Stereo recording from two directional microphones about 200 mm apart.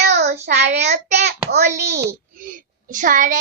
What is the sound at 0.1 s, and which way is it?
Child singing, 55° right (ahead or behind).